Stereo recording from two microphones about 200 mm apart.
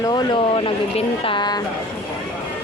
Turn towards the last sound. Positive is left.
turn(degrees=20)  # may be behind; listen again after turning